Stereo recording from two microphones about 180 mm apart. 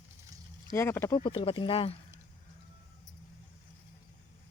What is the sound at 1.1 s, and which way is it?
Speech, 25° left (ahead or behind).